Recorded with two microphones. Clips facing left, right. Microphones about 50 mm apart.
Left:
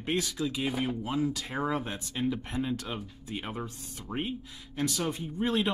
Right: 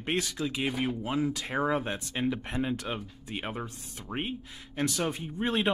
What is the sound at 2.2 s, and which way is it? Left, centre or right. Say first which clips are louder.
Speech: even; right.